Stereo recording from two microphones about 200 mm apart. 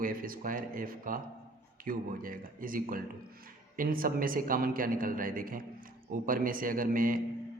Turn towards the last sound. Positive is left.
turn(degrees=-45)  # may be behind; listen again after turning